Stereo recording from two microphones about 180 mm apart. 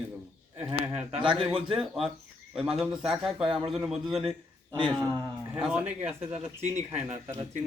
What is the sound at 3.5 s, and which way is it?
Speech, 30° right (ahead or behind).